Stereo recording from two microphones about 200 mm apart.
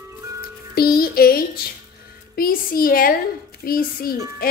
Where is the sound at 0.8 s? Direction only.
50° left (ahead or behind).